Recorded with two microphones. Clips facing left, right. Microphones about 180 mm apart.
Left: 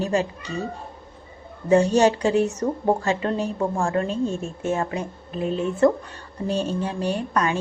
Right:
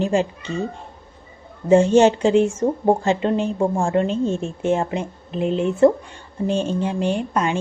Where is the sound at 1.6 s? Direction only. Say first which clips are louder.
Right 4 dB; 25° right (ahead or behind).